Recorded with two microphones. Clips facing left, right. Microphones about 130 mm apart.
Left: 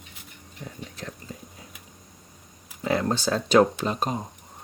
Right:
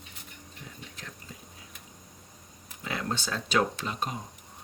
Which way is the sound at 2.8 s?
35° left (ahead or behind).